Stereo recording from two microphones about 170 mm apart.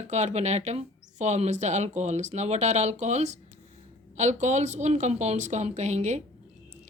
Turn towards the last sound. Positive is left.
turn(degrees=-40)  # may be behind; listen again after turning